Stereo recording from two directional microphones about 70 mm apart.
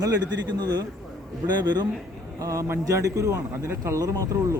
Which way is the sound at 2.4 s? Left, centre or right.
Right.